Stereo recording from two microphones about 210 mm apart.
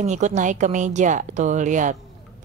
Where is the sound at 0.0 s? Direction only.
35° right (ahead or behind).